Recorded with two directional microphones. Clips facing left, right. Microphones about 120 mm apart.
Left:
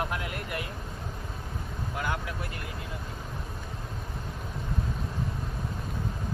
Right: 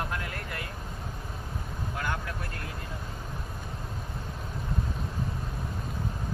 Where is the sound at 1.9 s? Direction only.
15° left (ahead or behind).